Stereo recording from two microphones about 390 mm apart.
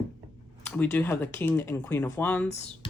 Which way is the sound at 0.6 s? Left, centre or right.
Centre.